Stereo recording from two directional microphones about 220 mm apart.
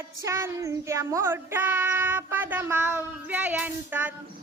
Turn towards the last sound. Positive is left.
turn(degrees=-10)  # may be behind; listen again after turning